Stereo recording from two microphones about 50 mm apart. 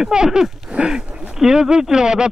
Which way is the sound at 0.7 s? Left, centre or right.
Centre.